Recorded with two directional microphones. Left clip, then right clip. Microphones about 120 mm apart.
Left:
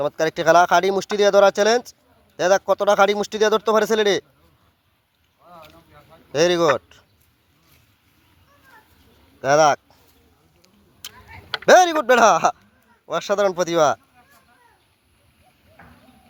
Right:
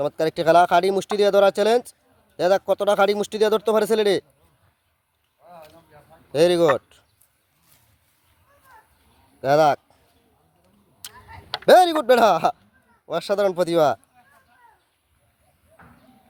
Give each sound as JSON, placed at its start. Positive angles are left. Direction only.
{"t": 0.0, "sound": "speech", "side_deg": -15}
{"t": 6.3, "sound": "speech", "side_deg": -20}
{"t": 9.4, "sound": "a sound", "side_deg": -15}
{"t": 11.7, "sound": "speech", "side_deg": -20}
{"t": 15.8, "sound": "clip-clop", "side_deg": -20}